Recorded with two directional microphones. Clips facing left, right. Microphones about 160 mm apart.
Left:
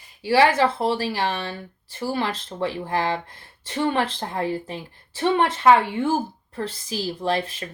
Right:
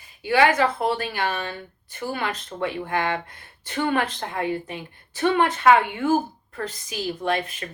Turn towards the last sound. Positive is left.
turn(degrees=30)  # may be behind; listen again after turning